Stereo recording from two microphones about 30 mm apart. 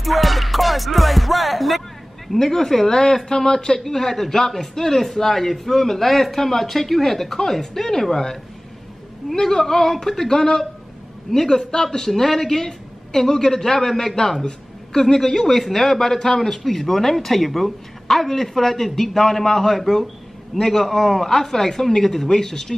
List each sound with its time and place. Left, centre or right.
0.0 s music: centre
2.3 s speech: centre
3.8 s speech: centre